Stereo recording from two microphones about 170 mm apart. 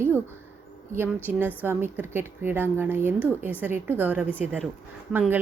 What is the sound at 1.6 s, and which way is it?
Speech, 15° right (ahead or behind).